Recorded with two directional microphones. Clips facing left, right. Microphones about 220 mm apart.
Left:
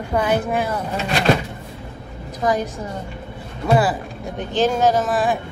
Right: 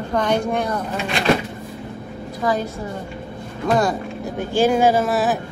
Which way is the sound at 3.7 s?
5° left (ahead or behind).